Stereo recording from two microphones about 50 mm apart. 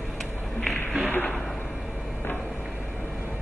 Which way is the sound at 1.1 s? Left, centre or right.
Left.